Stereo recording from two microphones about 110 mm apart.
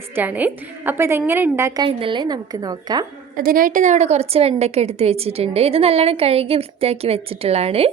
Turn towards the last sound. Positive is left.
turn(degrees=-70)  # may be behind; listen again after turning